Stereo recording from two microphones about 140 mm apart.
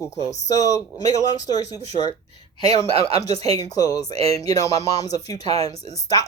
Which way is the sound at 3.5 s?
25° left (ahead or behind).